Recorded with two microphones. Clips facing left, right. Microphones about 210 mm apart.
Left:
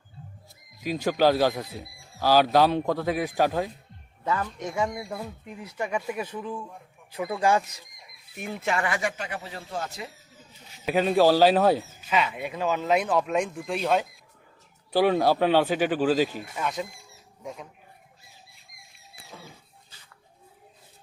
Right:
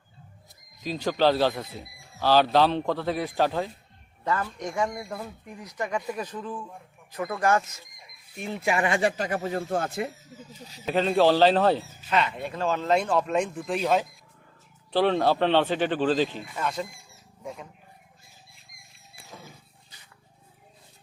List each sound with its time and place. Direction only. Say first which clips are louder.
1.0 s speech: left 1 dB; 10° left (ahead or behind)
8.6 s speech: right 3 dB; 20° right (ahead or behind)
9.0 s speech: right 6 dB; 35° right (ahead or behind); by 10.1 s 55° right (ahead or behind)
10.8 s speech: left 1 dB; 10° left (ahead or behind)
14.9 s speech: left 1 dB; 10° left (ahead or behind)